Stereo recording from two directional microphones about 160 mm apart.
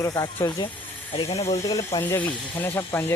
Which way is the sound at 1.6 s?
20° left (ahead or behind).